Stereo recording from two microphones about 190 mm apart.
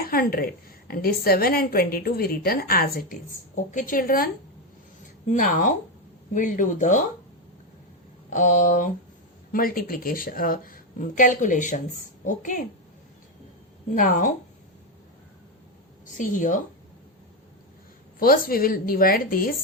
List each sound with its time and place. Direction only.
0.0 s a woman's voice: 50° left (ahead or behind)
5.3 s speech: 45° left (ahead or behind)
8.3 s a woman's voice: 40° left (ahead or behind)
13.9 s a woman's voice: 45° left (ahead or behind)
16.0 s a woman's voice: 45° left (ahead or behind)
18.2 s a woman's voice: 50° left (ahead or behind)